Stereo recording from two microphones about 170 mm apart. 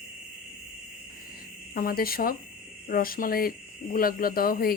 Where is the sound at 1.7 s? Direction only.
60° left (ahead or behind).